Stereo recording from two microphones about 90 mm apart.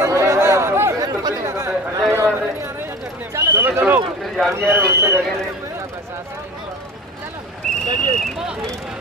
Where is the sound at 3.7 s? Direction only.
20° right (ahead or behind).